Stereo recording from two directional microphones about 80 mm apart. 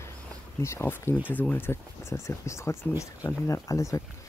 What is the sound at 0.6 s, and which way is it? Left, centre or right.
Speech, left.